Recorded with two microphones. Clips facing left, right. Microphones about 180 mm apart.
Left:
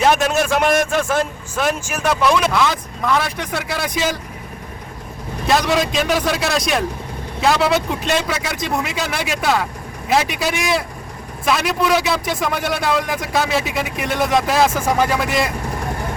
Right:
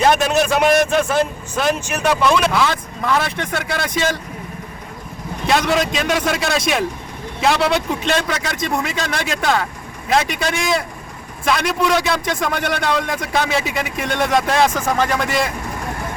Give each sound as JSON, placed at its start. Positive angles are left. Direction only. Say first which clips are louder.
{"t": 0.0, "sound": "a man's voice", "louder": "right 1 dB", "side_deg": 0}
{"t": 5.5, "sound": "a man's voice", "louder": "even", "side_deg": 0}